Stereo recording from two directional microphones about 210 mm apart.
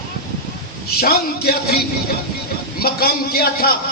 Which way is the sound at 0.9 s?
45° left (ahead or behind).